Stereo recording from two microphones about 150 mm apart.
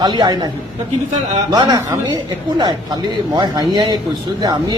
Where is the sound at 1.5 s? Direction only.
25° right (ahead or behind).